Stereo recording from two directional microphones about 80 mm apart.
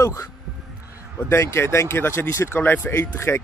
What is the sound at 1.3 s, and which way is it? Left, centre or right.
Speech, left.